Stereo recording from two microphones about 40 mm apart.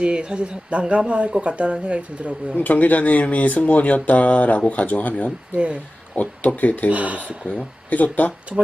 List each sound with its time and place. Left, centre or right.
0.0 s speech: right
2.6 s speech: left
6.9 s speech: right
7.5 s speech: left
8.5 s speech: centre